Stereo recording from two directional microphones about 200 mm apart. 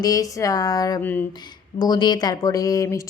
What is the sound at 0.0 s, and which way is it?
A woman's voice, 15° left (ahead or behind).